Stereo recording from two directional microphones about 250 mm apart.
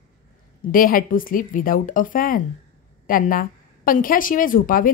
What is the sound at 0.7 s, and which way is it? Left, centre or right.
A woman's voice, left.